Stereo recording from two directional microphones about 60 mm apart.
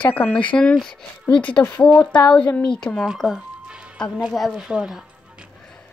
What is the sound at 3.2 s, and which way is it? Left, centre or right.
Speech, centre.